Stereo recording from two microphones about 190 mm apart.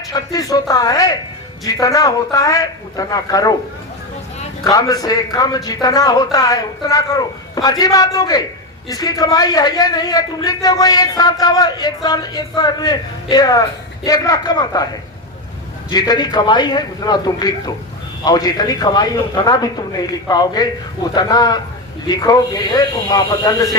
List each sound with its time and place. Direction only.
0.1 s a man's voice: 20° left (ahead or behind)
4.6 s a man's voice: 20° left (ahead or behind)
15.9 s a man's voice: 20° left (ahead or behind)